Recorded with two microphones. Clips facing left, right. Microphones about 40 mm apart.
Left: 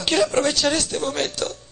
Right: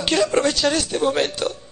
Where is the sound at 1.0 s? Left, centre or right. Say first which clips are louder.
Right 4 dB; centre.